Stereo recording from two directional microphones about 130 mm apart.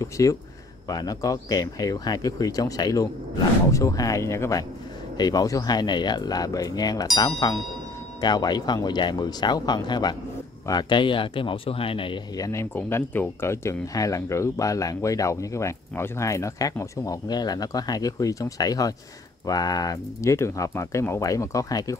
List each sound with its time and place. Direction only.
0.0 s speech: 25° left (ahead or behind); by 12.2 s 45° left (ahead or behind)
12.4 s speech: 25° left (ahead or behind)
12.7 s speech: 15° left (ahead or behind)